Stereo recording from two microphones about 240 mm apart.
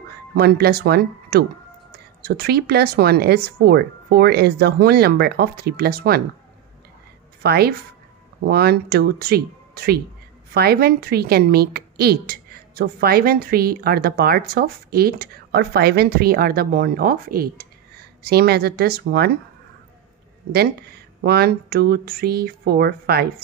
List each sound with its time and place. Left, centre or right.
0.3 s speech: right
7.4 s speech: right
20.5 s speech: right